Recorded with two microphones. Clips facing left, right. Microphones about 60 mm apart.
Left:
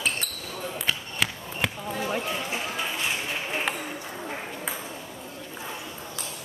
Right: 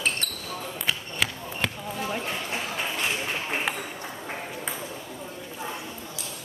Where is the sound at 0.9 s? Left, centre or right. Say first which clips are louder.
Right 1 dB; centre.